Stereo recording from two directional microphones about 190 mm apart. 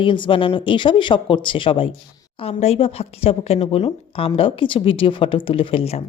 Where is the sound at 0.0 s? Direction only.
25° left (ahead or behind).